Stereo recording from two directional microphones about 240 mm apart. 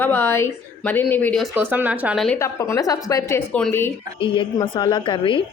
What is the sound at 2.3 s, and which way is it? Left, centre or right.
Speech, centre.